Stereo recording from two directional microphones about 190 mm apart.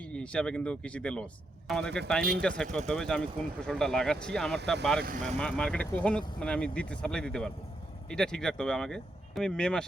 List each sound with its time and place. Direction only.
0.1 s speech: 5° left (ahead or behind)